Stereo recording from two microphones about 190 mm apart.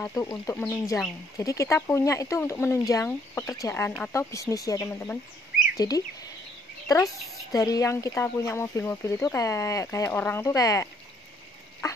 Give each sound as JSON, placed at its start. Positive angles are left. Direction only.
{"t": 0.0, "sound": "speech", "side_deg": 15}
{"t": 7.5, "sound": "speech", "side_deg": 20}
{"t": 11.8, "sound": "duck", "side_deg": 20}